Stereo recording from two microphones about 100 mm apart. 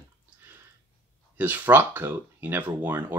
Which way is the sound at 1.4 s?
20° right (ahead or behind).